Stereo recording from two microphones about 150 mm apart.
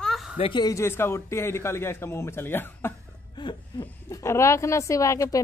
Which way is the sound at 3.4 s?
30° left (ahead or behind).